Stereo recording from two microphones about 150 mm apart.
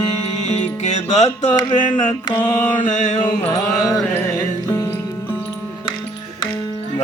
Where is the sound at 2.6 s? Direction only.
60° left (ahead or behind).